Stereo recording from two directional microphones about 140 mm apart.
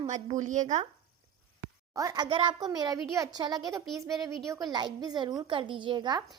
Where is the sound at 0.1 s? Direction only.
60° right (ahead or behind).